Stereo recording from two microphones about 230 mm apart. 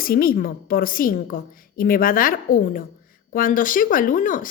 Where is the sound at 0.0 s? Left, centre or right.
Left.